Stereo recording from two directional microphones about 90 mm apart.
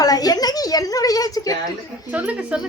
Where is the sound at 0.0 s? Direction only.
45° left (ahead or behind).